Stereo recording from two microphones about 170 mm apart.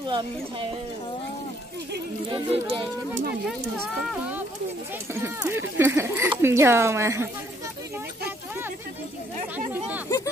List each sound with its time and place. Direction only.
0.0 s speech: 25° right (ahead or behind)
2.2 s speech: 30° right (ahead or behind)
5.1 s speech: 15° right (ahead or behind)
9.7 s speech: 10° right (ahead or behind)